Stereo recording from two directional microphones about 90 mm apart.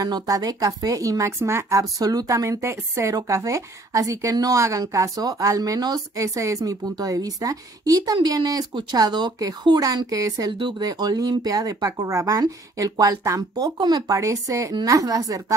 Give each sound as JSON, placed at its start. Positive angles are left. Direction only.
{"t": 0.0, "sound": "speech", "side_deg": -40}
{"t": 10.0, "sound": "speech", "side_deg": -40}